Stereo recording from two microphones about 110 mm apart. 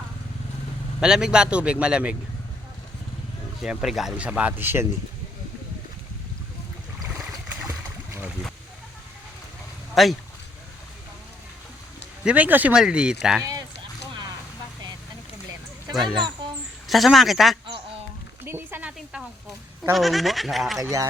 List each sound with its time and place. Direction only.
1.0 s speech: 5° right (ahead or behind)
3.6 s speech: 5° right (ahead or behind)
7.7 s splash: 15° right (ahead or behind)
9.9 s speech: centre (ahead or behind)
12.2 s speech: 15° right (ahead or behind)
13.4 s a sound: 30° right (ahead or behind)
16.0 s speech: centre (ahead or behind)
18.4 s speech: 20° right (ahead or behind)
19.9 s speech: centre (ahead or behind)